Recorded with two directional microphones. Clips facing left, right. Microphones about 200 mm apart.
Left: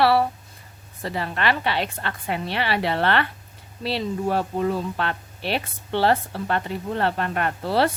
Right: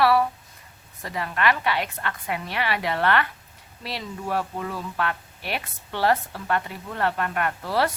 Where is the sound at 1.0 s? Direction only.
30° left (ahead or behind).